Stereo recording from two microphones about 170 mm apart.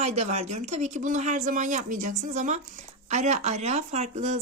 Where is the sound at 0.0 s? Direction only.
40° right (ahead or behind).